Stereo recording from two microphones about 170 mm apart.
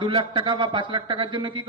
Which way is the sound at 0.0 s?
30° right (ahead or behind).